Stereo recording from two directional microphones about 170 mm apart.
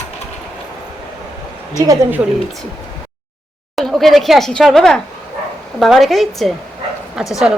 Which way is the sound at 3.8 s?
Centre (ahead or behind).